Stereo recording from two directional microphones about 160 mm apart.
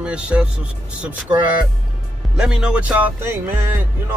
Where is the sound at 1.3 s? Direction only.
25° right (ahead or behind).